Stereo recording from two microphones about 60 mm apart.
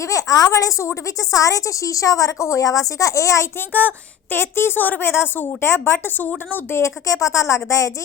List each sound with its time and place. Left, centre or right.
0.0 s a woman's voice: left
3.7 s speech: left
4.4 s a woman's voice: left
6.7 s a woman's voice: left